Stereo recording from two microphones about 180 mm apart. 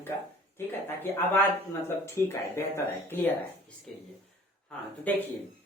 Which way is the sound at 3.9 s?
Centre (ahead or behind).